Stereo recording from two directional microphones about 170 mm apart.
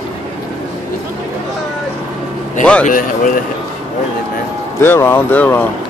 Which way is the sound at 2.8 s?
50° left (ahead or behind).